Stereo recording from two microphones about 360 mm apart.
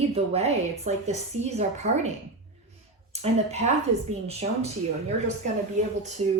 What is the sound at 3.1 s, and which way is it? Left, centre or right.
A woman's voice, centre.